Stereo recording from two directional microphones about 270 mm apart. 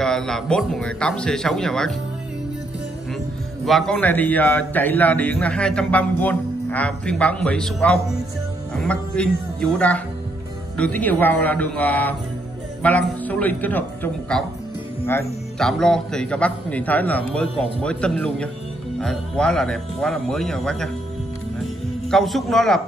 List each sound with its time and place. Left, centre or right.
0.0 s a man's voice: centre
3.6 s a man's voice: centre
15.6 s a man's voice: centre
22.1 s a man's voice: centre